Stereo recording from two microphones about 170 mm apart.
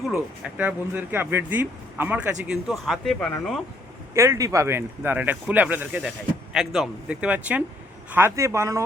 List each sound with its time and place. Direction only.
0.1 s speech: 10° right (ahead or behind)
4.1 s speech: 15° right (ahead or behind)